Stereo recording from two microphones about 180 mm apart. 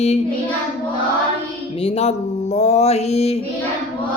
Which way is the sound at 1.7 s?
35° left (ahead or behind).